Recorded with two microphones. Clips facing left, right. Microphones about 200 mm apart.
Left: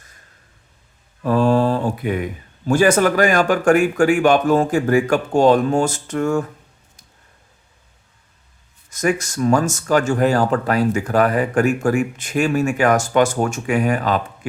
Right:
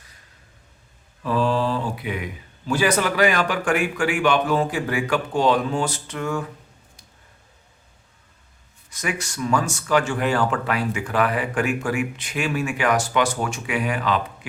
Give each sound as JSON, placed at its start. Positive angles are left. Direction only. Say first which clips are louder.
{"t": 1.2, "sound": "speech", "louder": "left 6 dB", "side_deg": 45}
{"t": 8.9, "sound": "speech", "louder": "left 9 dB", "side_deg": 45}